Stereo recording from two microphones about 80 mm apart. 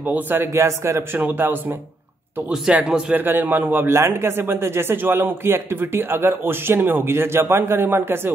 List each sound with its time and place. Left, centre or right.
0.0 s a man's voice: right
0.6 s a man's voice: right
2.7 s speech: centre
3.2 s a man's voice: right